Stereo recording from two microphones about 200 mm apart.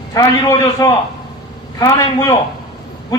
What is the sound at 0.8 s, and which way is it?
A man's voice, 20° left (ahead or behind).